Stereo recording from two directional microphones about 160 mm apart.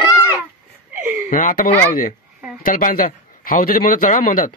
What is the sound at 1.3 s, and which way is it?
A man's voice, 55° left (ahead or behind).